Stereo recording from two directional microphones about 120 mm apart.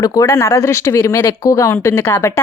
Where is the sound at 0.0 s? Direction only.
25° left (ahead or behind).